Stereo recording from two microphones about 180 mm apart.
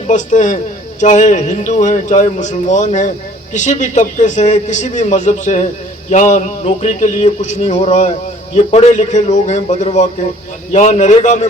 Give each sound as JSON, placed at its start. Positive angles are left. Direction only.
{"t": 0.1, "sound": "a man's voice", "side_deg": 45}